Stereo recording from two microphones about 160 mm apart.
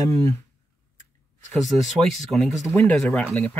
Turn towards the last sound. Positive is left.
turn(degrees=15)  # may be behind; listen again after turning